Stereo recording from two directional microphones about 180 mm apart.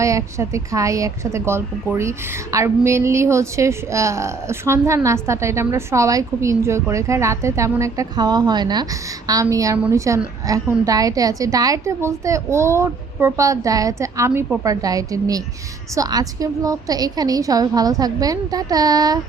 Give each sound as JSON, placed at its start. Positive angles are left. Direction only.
{"t": 0.0, "sound": "a woman's voice", "side_deg": -15}